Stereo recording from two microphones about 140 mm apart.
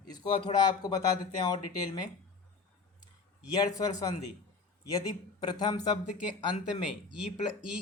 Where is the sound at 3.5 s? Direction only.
25° left (ahead or behind).